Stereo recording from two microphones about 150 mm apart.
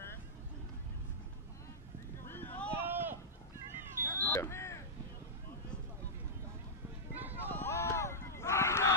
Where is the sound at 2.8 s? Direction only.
15° right (ahead or behind).